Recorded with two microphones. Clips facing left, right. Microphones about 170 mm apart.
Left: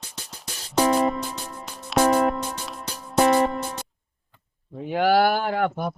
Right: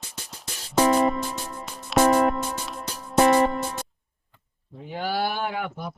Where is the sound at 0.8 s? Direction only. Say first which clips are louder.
Right 1 dB; centre (ahead or behind).